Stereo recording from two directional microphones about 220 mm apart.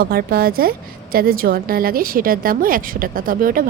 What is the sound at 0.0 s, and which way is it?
A woman's voice, 45° right (ahead or behind).